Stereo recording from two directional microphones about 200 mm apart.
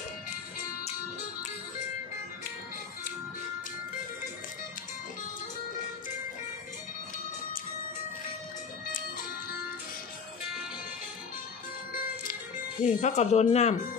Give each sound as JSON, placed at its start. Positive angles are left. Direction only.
{"t": 12.8, "sound": "speech", "side_deg": 35}